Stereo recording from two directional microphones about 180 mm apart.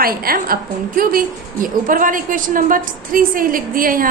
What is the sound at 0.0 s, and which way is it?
A woman's voice, 55° right (ahead or behind).